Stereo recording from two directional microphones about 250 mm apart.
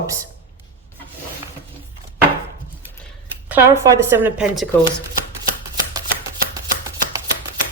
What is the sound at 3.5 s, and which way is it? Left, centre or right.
A woman's voice, centre.